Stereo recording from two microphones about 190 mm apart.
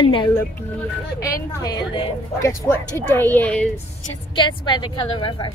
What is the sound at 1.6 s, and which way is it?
A woman's voice, 25° left (ahead or behind).